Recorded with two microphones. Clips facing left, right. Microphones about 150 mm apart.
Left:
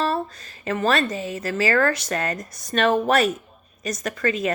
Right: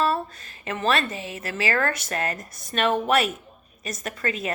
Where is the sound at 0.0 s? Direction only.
35° left (ahead or behind).